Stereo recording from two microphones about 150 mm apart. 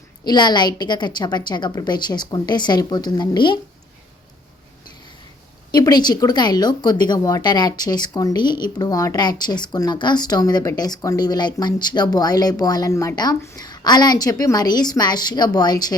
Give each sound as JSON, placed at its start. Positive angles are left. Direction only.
{"t": 0.3, "sound": "speech", "side_deg": 30}
{"t": 5.7, "sound": "speech", "side_deg": 30}